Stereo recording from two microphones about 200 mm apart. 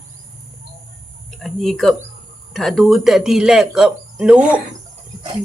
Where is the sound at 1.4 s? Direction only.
Centre (ahead or behind).